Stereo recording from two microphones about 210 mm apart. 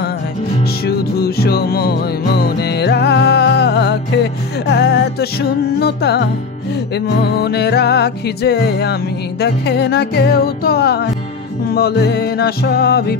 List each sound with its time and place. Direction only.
0.8 s music: 50° left (ahead or behind)
7.2 s music: 50° left (ahead or behind)